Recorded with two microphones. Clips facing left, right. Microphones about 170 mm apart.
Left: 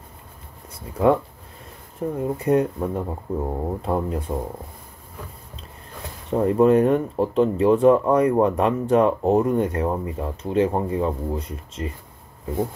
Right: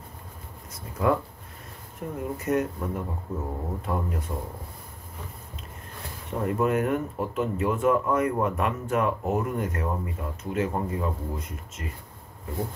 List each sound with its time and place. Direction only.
0.7 s speech: 30° left (ahead or behind)
6.3 s speech: 30° left (ahead or behind)